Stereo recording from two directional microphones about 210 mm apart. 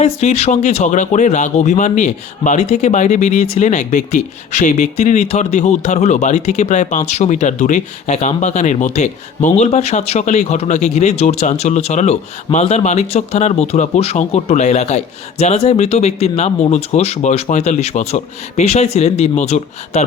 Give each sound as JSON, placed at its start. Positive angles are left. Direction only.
{"t": 0.0, "sound": "speech", "side_deg": 30}